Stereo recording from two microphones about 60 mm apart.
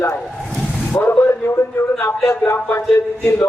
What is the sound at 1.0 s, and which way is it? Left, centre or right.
A man's voice, left.